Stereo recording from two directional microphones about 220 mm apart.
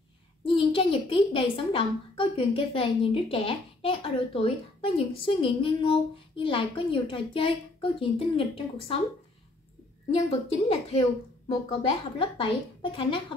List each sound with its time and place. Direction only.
0.4 s a woman's voice: 25° left (ahead or behind)
10.7 s a woman's voice: 25° left (ahead or behind)